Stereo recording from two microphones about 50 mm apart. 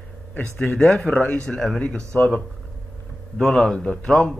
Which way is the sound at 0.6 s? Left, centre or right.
Centre.